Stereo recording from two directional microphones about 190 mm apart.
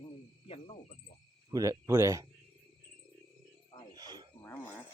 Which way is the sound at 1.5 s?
15° right (ahead or behind).